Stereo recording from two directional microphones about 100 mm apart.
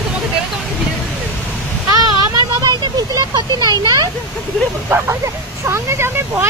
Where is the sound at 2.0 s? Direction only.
40° right (ahead or behind).